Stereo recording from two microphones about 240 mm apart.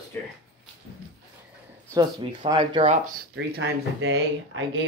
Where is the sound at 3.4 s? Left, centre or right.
Right.